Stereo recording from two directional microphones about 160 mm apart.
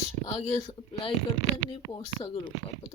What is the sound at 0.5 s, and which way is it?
Speech, 35° left (ahead or behind).